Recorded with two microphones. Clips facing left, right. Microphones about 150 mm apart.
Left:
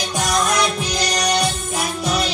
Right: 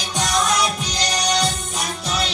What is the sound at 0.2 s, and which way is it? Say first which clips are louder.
Music: left 1 dB; 50° left (ahead or behind).